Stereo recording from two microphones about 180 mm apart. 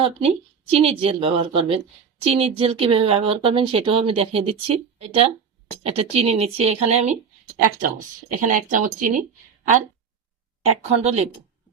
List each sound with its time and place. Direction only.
0.0 s speech: 30° right (ahead or behind)
7.6 s speech: 50° right (ahead or behind)
10.7 s speech: 35° right (ahead or behind)